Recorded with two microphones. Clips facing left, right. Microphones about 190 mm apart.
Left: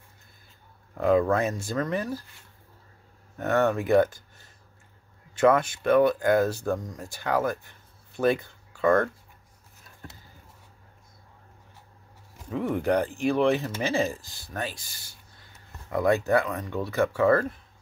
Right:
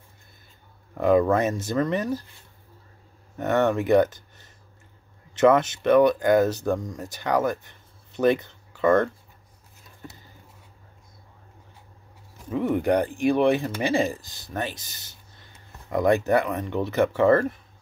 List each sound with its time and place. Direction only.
1.0 s speech: 20° right (ahead or behind)
3.3 s speech: 20° right (ahead or behind)
12.4 s speech: 20° right (ahead or behind)